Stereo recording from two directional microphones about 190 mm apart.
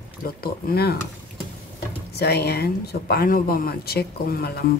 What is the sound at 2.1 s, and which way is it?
Speech, 55° left (ahead or behind).